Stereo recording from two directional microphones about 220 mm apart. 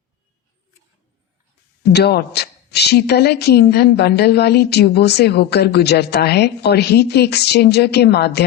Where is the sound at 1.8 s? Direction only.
50° left (ahead or behind).